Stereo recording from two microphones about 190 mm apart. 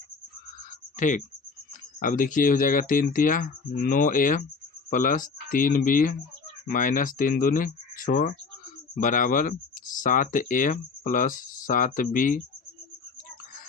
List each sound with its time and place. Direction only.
0.9 s speech: 40° left (ahead or behind)